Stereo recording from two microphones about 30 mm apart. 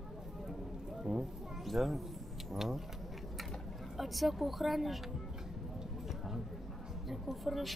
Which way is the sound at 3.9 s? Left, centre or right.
Centre.